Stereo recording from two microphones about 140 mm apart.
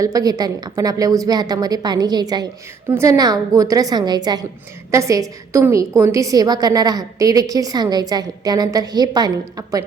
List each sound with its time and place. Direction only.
0.0 s a woman's voice: 25° right (ahead or behind)